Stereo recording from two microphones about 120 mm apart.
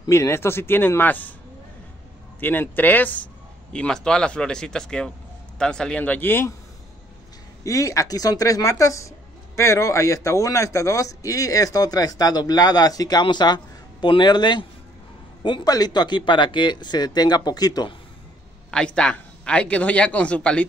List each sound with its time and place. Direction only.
0.0 s a man's voice: 25° left (ahead or behind)
2.4 s speech: 15° left (ahead or behind)
7.6 s a man's voice: 25° left (ahead or behind)
18.7 s speech: 5° left (ahead or behind)